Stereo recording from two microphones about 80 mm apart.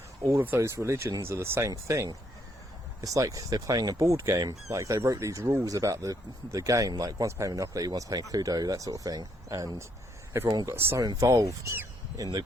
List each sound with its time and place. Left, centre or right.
0.3 s speech: right
3.9 s speech: right
10.3 s speech: right
11.0 s speech: right